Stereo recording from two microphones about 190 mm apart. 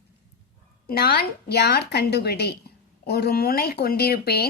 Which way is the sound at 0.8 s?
55° left (ahead or behind).